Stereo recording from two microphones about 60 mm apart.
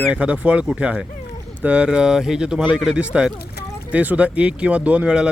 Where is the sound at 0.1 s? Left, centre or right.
Right.